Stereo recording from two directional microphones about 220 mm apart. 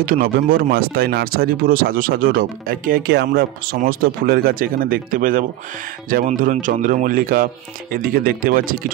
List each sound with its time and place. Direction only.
0.0 s speech: 40° right (ahead or behind)